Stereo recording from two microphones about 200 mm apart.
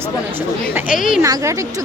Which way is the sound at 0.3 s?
10° right (ahead or behind).